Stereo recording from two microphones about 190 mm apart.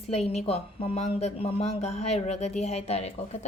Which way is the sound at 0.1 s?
35° left (ahead or behind).